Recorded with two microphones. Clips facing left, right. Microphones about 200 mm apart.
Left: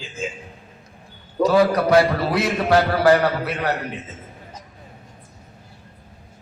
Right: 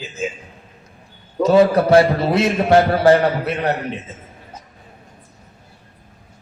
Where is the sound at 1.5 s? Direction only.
25° right (ahead or behind).